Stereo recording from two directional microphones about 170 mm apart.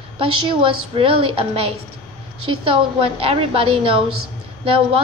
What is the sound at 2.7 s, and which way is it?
A woman's voice, 35° right (ahead or behind).